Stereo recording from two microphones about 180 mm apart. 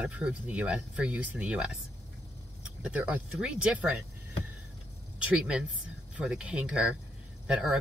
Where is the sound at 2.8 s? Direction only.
10° right (ahead or behind).